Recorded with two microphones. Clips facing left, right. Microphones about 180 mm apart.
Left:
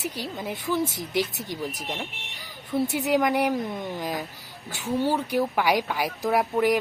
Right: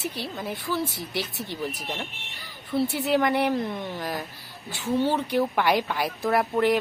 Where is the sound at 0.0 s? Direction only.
15° left (ahead or behind).